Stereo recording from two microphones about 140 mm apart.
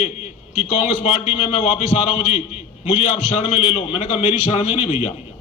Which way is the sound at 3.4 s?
45° left (ahead or behind).